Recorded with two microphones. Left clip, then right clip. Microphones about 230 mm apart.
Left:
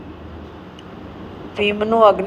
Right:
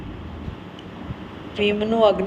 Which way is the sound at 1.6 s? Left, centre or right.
Left.